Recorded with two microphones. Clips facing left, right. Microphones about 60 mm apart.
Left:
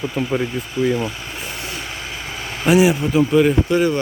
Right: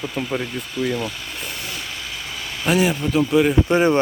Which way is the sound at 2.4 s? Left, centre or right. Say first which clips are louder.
Left 2 dB; left.